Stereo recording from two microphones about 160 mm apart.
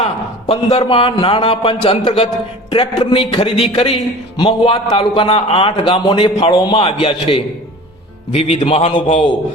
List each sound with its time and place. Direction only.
0.0 s a man's voice: 40° left (ahead or behind)